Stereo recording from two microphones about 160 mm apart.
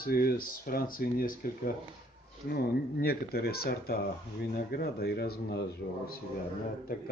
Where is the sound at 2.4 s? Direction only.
90° left.